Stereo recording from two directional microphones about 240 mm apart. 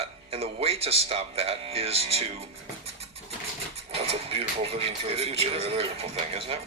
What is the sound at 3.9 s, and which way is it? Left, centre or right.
Speech, right.